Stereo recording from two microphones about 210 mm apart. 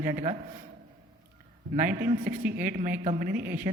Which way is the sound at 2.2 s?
10° right (ahead or behind).